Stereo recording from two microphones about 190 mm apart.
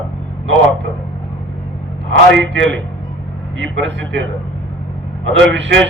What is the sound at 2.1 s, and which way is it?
A man's voice, 80° right.